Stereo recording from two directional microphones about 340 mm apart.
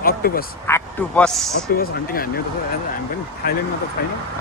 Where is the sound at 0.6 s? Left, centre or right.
Centre.